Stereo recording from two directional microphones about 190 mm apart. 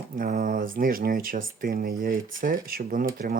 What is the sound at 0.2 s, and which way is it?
Speech, 50° right (ahead or behind).